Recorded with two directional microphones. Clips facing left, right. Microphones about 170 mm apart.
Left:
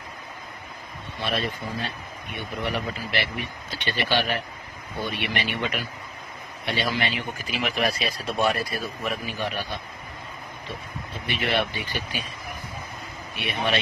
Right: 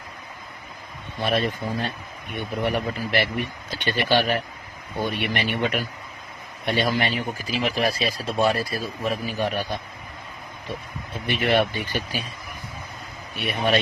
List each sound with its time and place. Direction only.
1.2 s speech: 50° right (ahead or behind); by 8.1 s 30° right (ahead or behind)
8.2 s speech: centre (ahead or behind)
8.4 s speech: 30° right (ahead or behind)
9.0 s speech: 40° right (ahead or behind)
11.3 s speech: 45° right (ahead or behind)
13.3 s speech: 40° right (ahead or behind)